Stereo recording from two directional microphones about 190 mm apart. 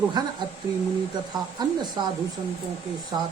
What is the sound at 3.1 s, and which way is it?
Speech, 20° right (ahead or behind).